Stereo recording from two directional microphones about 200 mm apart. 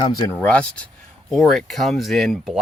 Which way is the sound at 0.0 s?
20° left (ahead or behind).